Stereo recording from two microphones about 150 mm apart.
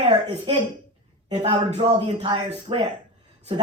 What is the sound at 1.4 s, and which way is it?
Speech, 35° right (ahead or behind).